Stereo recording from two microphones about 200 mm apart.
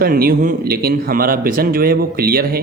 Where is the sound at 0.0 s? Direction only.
45° right (ahead or behind).